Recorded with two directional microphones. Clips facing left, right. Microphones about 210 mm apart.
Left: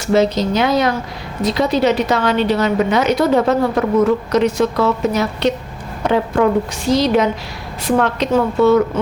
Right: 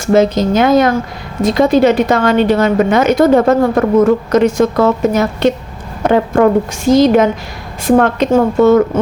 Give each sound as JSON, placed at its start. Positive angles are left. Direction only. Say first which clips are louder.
{"t": 0.0, "sound": "a woman's voice", "louder": "right 4 dB", "side_deg": -50}